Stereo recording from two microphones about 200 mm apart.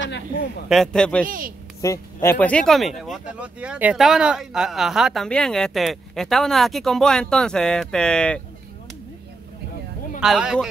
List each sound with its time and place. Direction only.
0.0 s a man's voice: 60° left (ahead or behind)
0.7 s speech: centre (ahead or behind)
1.2 s speech: 45° right (ahead or behind)
1.8 s speech: 15° left (ahead or behind)
10.2 s speech: 5° right (ahead or behind)